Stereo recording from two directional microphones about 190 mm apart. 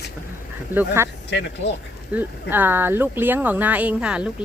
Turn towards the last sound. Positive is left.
turn(degrees=-5)  # may be behind; listen again after turning